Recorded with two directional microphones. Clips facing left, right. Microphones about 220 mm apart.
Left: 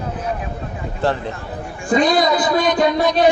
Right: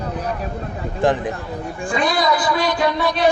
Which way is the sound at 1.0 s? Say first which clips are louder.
Right 2 dB; 15° right (ahead or behind).